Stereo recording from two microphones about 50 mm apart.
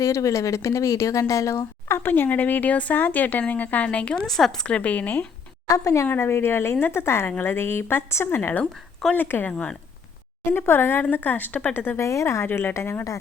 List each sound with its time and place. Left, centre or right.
0.0 s speech: left
2.0 s speech: left
3.9 s speech: left
4.2 s a woman's voice: centre
4.6 s speech: left
5.7 s speech: left
6.1 s speech: left
7.3 s a woman's voice: left
9.5 s speech: left
10.5 s a woman's voice: left
11.9 s a woman's voice: left
12.5 s a woman's voice: left